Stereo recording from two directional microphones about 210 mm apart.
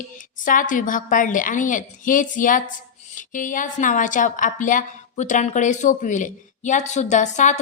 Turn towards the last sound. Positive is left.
turn(degrees=35)  # may be behind; listen again after turning